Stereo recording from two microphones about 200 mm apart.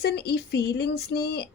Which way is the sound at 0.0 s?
55° left (ahead or behind).